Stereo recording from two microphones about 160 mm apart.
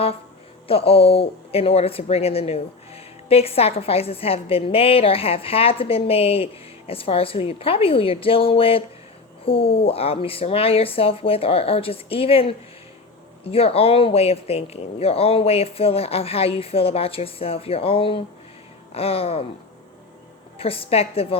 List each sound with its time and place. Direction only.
0.7 s speech: 35° left (ahead or behind)
20.6 s speech: 35° left (ahead or behind)